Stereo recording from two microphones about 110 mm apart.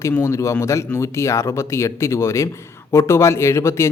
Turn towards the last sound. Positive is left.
turn(degrees=25)  # may be behind; listen again after turning